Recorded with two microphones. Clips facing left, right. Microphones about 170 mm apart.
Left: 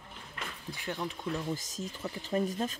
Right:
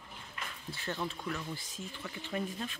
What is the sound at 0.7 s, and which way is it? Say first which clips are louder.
Speech: left 1 dB; 15° left (ahead or behind).